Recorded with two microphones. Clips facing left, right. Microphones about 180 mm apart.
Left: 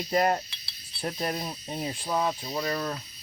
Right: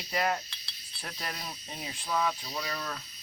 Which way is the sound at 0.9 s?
30° left (ahead or behind).